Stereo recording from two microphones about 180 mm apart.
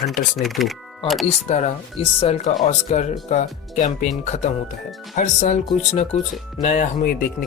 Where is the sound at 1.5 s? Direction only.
35° left (ahead or behind).